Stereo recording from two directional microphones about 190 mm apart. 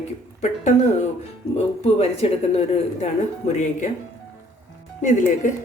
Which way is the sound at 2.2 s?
30° left (ahead or behind).